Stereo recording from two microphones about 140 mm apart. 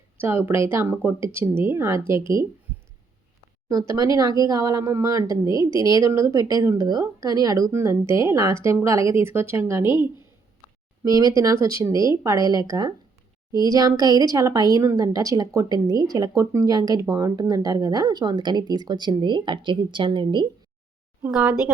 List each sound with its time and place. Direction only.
0.2 s a woman's voice: 15° right (ahead or behind)
3.7 s a woman's voice: 25° right (ahead or behind)
21.2 s speech: 5° right (ahead or behind)